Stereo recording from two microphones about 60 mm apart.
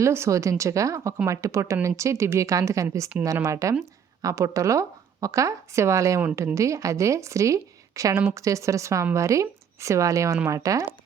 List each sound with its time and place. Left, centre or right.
0.0 s speech: right